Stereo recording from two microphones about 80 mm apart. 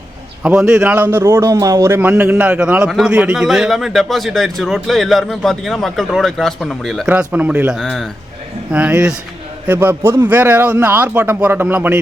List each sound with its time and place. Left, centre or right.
0.4 s a man's voice: centre; by 1.9 s right
1.9 s a man's voice: right; by 7.1 s centre
7.3 s a man's voice: centre
7.8 s a man's voice: centre
8.7 s a man's voice: centre